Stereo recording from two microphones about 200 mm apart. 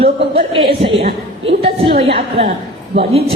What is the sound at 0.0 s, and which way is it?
A woman's voice, 30° right (ahead or behind).